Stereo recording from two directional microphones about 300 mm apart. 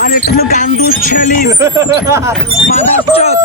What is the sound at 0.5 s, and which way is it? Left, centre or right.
Speech, left.